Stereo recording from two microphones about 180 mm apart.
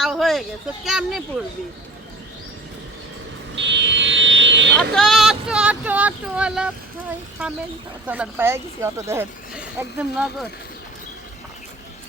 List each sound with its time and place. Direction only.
0.0 s a sound: centre (ahead or behind)
0.9 s speech: centre (ahead or behind)
3.5 s buzzer: 80° right
4.9 s speech: centre (ahead or behind)
8.0 s speech: 10° right (ahead or behind)